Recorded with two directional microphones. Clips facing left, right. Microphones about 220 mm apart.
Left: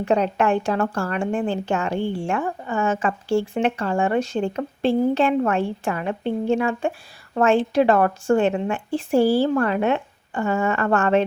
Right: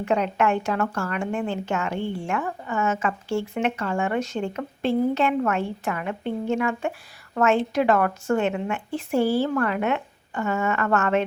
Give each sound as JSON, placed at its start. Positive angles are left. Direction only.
{"t": 0.0, "sound": "speech", "side_deg": 30}